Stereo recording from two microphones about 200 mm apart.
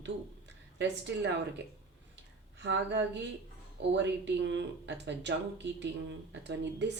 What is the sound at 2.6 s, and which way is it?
A woman's voice, 60° right (ahead or behind).